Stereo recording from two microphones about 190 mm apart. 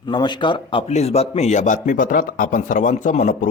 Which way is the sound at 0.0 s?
25° left (ahead or behind).